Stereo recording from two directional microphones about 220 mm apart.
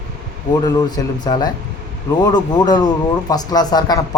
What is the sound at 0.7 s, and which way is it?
Speech, 20° left (ahead or behind).